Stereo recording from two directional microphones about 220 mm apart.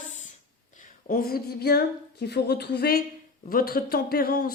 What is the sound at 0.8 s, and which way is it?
A woman's voice, 40° left (ahead or behind).